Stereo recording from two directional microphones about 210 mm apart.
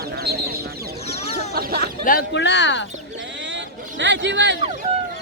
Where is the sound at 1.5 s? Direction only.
45° right (ahead or behind).